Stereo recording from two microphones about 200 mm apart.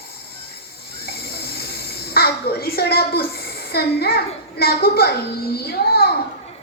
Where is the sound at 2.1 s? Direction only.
50° left (ahead or behind).